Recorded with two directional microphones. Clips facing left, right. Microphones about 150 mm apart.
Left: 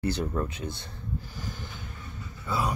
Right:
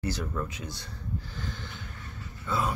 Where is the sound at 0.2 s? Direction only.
30° left (ahead or behind).